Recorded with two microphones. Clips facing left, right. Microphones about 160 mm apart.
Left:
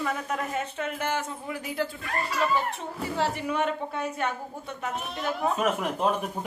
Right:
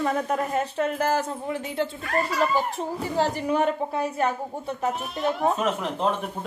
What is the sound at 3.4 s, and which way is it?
Speech, 35° right (ahead or behind).